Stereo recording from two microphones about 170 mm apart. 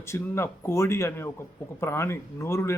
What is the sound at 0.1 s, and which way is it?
Speech, 15° left (ahead or behind).